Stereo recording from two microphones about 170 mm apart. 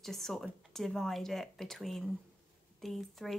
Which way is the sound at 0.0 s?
Centre (ahead or behind).